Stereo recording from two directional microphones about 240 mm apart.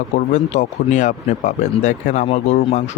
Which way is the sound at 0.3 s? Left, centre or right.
Left.